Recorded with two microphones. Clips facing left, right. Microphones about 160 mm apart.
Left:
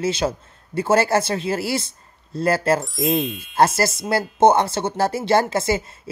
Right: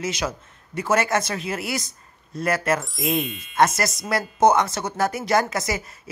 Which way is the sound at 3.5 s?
30° left (ahead or behind).